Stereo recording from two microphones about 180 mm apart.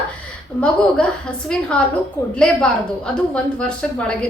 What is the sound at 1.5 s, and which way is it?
Speech, 5° left (ahead or behind).